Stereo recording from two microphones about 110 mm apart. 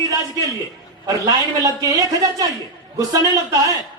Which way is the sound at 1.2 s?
35° right (ahead or behind).